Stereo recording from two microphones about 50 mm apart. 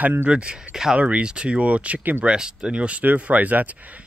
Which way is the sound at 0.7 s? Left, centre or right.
Centre.